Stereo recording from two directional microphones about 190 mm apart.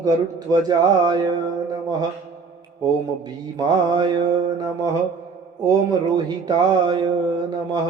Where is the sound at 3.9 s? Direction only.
20° right (ahead or behind).